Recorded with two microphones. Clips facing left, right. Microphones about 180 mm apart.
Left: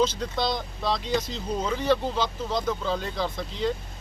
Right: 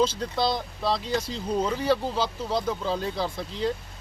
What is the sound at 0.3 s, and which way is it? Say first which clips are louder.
Speech: right 3 dB; 5° right (ahead or behind).